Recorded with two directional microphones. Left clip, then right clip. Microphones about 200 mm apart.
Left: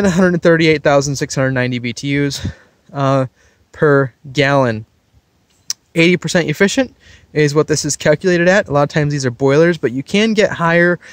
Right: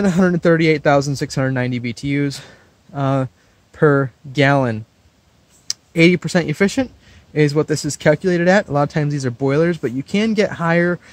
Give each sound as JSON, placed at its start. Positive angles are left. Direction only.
{"t": 0.0, "sound": "speech", "side_deg": 45}